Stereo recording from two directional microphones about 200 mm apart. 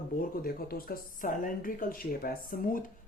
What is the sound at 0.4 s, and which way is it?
Speech, 50° left (ahead or behind).